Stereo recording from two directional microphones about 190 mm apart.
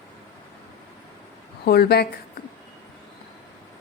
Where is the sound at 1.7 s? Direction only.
55° left (ahead or behind).